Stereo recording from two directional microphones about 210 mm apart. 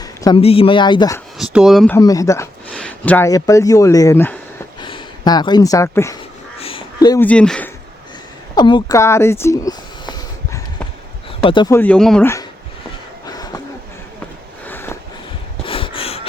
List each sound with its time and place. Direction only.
0.0 s a man's voice: 20° left (ahead or behind)
1.5 s speech: centre (ahead or behind)
2.0 s speech: 15° left (ahead or behind)
4.8 s speech: 20° left (ahead or behind)
6.6 s crow: 25° left (ahead or behind)
7.3 s speech: 5° left (ahead or behind)
8.5 s a sound: 20° left (ahead or behind)
11.4 s speech: 20° left (ahead or behind)
11.8 s speech: 5° left (ahead or behind)
13.2 s a sound: 20° left (ahead or behind)
14.6 s a sound: 10° left (ahead or behind)
15.6 s a sound: 25° left (ahead or behind)